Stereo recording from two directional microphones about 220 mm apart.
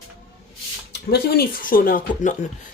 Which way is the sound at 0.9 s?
45° left (ahead or behind).